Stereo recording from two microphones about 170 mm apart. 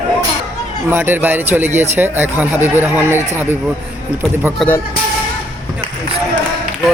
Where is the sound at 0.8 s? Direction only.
10° right (ahead or behind).